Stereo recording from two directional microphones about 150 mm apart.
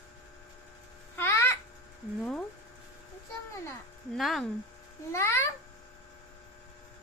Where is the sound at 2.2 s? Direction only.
Centre (ahead or behind).